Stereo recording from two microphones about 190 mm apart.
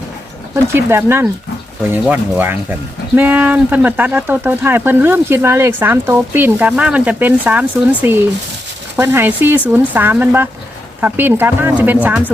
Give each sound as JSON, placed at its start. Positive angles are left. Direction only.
{"t": 0.5, "sound": "speech", "side_deg": -15}